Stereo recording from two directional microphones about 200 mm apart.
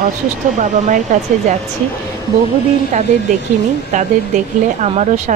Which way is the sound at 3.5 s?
40° right (ahead or behind).